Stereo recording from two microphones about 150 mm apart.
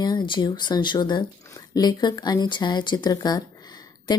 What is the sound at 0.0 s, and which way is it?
Speech, 30° left (ahead or behind).